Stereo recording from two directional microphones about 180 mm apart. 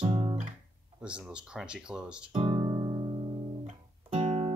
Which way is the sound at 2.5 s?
20° right (ahead or behind).